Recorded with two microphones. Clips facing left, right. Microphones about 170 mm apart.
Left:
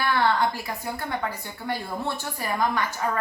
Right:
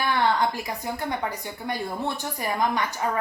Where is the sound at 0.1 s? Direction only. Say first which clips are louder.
Even; 20° right (ahead or behind).